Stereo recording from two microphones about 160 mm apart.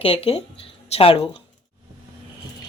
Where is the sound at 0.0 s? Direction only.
35° left (ahead or behind).